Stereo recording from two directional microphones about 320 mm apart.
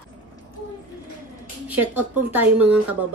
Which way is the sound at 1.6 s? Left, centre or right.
Centre.